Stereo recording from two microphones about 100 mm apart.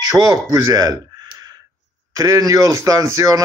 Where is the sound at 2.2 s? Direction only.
35° right (ahead or behind).